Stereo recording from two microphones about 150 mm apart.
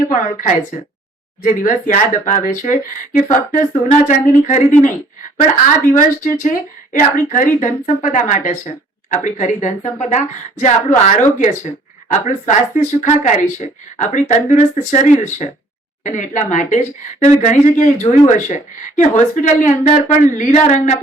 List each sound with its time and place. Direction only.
0.1 s a woman's voice: 60° left (ahead or behind)